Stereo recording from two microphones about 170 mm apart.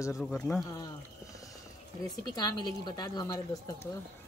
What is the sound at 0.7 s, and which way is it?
Speech, 20° left (ahead or behind).